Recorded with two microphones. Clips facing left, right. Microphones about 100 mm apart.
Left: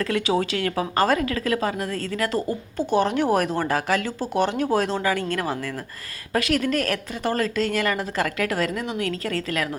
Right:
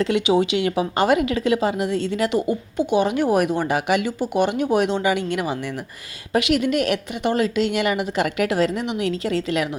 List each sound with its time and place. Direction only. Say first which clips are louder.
0.0 s a woman's voice: right 4 dB; 20° right (ahead or behind)